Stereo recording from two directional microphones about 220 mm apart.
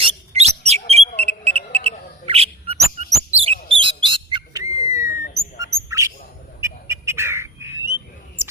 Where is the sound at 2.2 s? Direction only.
25° right (ahead or behind).